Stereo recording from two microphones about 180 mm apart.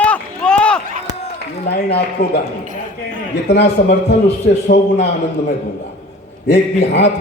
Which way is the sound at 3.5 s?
70° left (ahead or behind).